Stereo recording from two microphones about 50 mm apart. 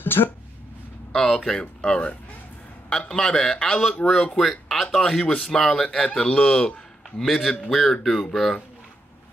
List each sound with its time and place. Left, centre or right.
0.0 s speech: left
1.1 s speech: centre
4.4 s speech: centre
5.9 s speech: left
7.2 s speech: centre